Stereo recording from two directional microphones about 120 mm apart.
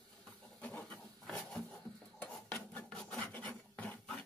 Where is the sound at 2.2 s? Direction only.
10° left (ahead or behind).